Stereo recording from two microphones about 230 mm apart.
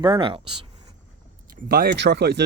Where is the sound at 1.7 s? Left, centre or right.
Right.